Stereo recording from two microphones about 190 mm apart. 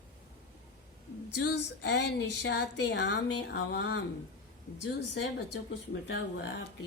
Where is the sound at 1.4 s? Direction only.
65° left (ahead or behind).